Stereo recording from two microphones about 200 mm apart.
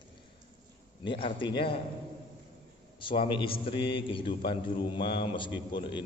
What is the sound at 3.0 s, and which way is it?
A man's voice, 25° left (ahead or behind).